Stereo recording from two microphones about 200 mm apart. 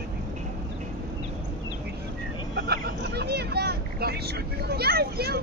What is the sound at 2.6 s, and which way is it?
Vehicle, 55° right (ahead or behind).